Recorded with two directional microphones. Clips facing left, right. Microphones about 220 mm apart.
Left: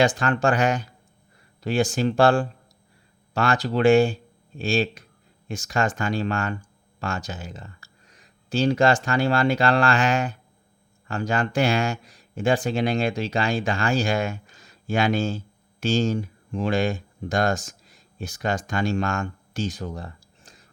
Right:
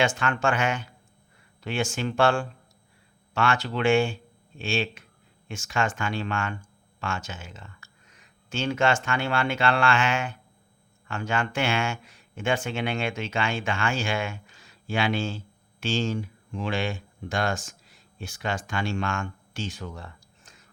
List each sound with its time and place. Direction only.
0.0 s speech: 35° left (ahead or behind)